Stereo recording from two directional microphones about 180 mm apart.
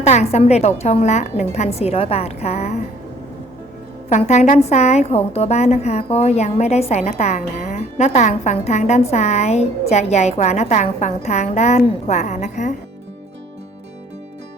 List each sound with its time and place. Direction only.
0.0 s a woman's voice: 35° left (ahead or behind)
4.1 s a woman's voice: 40° left (ahead or behind)